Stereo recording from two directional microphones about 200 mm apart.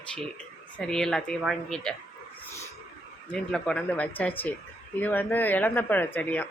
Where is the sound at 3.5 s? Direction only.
5° left (ahead or behind).